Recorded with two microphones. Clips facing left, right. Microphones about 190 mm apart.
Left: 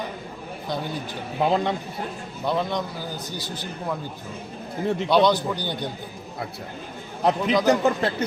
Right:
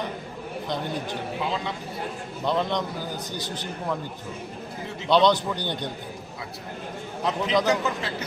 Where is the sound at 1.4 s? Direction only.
60° left (ahead or behind).